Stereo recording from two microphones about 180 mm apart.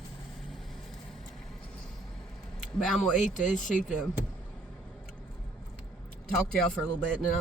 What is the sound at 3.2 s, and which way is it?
Speech, 45° left (ahead or behind).